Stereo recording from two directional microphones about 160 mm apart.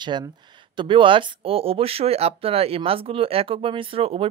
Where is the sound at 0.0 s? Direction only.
30° right (ahead or behind).